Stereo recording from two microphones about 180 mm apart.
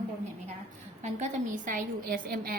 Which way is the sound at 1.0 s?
40° right (ahead or behind).